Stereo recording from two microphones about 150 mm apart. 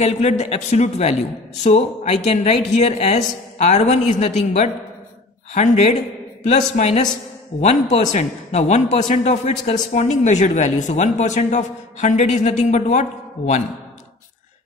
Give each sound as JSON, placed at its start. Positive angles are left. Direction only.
{"t": 0.0, "sound": "a man's voice", "side_deg": 50}